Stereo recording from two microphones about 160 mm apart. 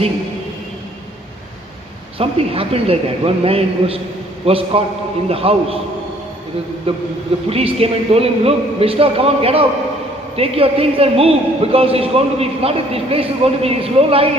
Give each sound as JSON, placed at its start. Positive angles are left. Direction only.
{"t": 2.1, "sound": "a man's voice", "side_deg": -35}
{"t": 6.9, "sound": "a man's voice", "side_deg": -35}